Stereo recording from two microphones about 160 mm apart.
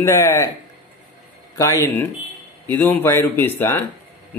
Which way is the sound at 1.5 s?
20° left (ahead or behind).